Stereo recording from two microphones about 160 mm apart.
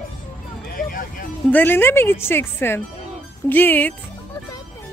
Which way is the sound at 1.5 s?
10° left (ahead or behind).